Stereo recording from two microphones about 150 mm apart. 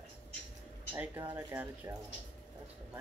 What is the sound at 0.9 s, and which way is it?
Speech, 10° right (ahead or behind).